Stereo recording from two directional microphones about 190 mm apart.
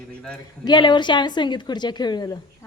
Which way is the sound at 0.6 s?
25° left (ahead or behind).